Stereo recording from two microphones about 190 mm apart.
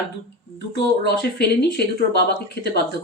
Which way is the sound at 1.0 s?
60° left (ahead or behind).